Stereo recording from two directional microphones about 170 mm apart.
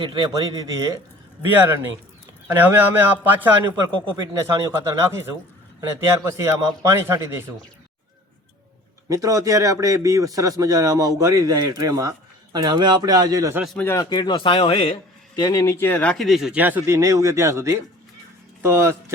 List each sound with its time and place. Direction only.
0.0 s a man's voice: 30° right (ahead or behind)
1.5 s a man's voice: 10° right (ahead or behind)
6.1 s speech: 15° right (ahead or behind)
9.0 s a man's voice: 20° right (ahead or behind)
13.7 s speech: 15° left (ahead or behind); by 14.9 s 35° left (ahead or behind)
15.4 s speech: 20° left (ahead or behind); by 18.9 s 15° right (ahead or behind)